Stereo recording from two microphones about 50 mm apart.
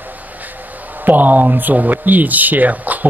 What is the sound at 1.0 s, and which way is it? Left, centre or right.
Speech, right.